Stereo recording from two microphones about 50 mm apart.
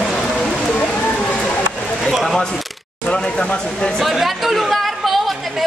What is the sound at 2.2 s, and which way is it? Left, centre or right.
Single-lens reflex camera, centre.